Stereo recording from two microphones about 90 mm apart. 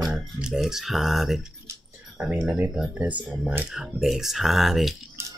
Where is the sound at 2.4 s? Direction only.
20° right (ahead or behind); by 4.9 s centre (ahead or behind).